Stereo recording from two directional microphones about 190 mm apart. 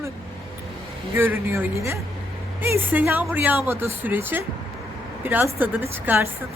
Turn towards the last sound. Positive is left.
turn(degrees=-10)  # may be behind; listen again after turning